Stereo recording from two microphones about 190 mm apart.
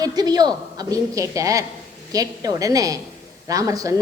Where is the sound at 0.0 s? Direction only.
20° right (ahead or behind).